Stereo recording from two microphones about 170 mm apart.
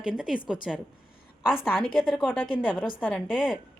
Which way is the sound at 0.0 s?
5° right (ahead or behind).